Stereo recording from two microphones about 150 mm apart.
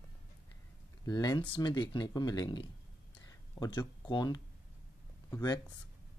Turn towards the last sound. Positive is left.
turn(degrees=25)  # may be behind; listen again after turning